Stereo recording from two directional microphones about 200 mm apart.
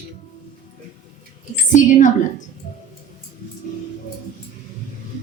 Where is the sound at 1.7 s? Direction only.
40° left (ahead or behind).